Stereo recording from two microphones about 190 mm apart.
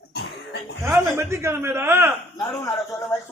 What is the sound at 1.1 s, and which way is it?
Speech, 15° right (ahead or behind).